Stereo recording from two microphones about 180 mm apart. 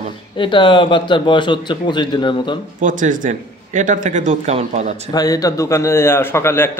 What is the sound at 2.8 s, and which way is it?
A man's voice, 45° right (ahead or behind).